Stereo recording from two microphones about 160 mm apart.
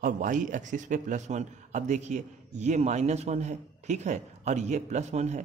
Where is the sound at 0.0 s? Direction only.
55° right (ahead or behind).